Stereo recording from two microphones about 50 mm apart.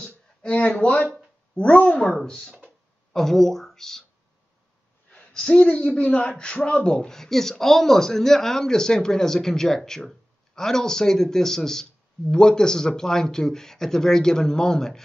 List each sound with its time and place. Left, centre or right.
0.0 s a sound: left
1.5 s speech: left
2.2 s speech: centre
5.1 s speech: centre